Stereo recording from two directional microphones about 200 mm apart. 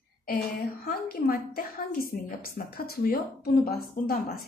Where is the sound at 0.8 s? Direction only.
45° left (ahead or behind).